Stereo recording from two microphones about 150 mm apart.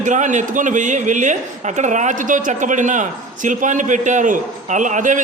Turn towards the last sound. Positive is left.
turn(degrees=-60)  # may be behind; listen again after turning